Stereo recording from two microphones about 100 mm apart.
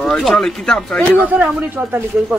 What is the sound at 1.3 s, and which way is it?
Speech, 15° right (ahead or behind).